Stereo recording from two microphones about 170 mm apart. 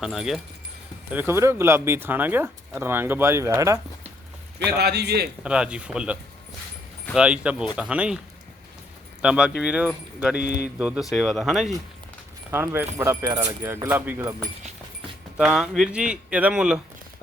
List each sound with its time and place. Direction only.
0.0 s speech: centre (ahead or behind)
1.1 s speech: 15° right (ahead or behind)
4.8 s a man's voice: 70° right (ahead or behind)
5.4 s speech: 5° right (ahead or behind)
9.2 s speech: 5° right (ahead or behind)
10.4 s speech: 80° left
10.8 s speech: 5° right (ahead or behind)
12.5 s speech: 10° right (ahead or behind)